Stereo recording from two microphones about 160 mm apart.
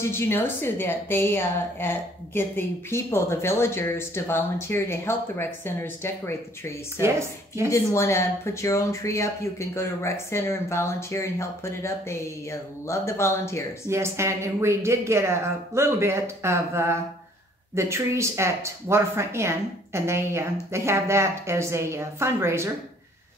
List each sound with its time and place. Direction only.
0.0 s a woman's voice: 15° left (ahead or behind)
7.0 s speech: 15° right (ahead or behind)
7.7 s a woman's voice: 15° left (ahead or behind)
13.8 s speech: 15° right (ahead or behind)